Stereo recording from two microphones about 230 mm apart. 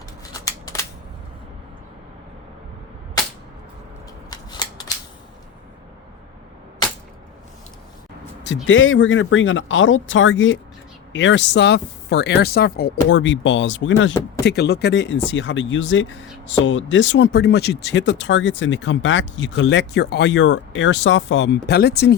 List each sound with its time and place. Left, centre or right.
0.3 s scissors: centre
8.6 s speech: left